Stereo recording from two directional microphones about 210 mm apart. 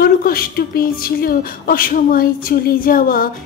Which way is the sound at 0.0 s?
45° left (ahead or behind).